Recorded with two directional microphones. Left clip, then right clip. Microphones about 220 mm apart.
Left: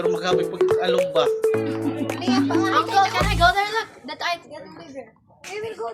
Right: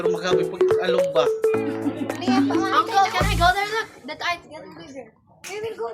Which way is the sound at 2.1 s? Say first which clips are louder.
Even; 20° left (ahead or behind).